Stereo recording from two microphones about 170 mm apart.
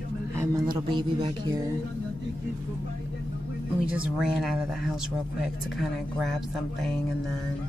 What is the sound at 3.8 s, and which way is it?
Speech, 5° right (ahead or behind).